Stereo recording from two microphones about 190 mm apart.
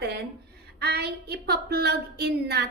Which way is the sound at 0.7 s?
60° right (ahead or behind).